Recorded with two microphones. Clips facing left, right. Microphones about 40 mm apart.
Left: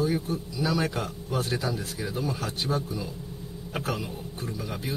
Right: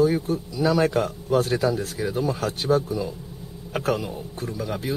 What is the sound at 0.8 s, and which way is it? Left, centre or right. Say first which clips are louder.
Speech: right 8 dB; right.